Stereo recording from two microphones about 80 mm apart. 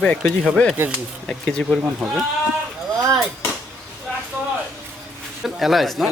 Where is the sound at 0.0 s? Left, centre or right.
Centre.